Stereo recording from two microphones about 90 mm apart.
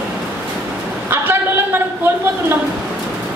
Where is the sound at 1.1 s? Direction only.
25° right (ahead or behind).